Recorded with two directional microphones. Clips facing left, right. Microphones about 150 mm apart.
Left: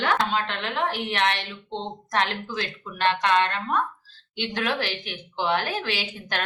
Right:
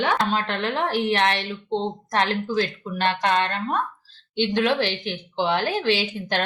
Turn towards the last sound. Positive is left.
turn(degrees=-30)  # may be behind; listen again after turning